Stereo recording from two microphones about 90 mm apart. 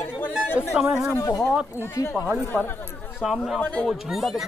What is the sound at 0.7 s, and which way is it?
Speech, 10° right (ahead or behind).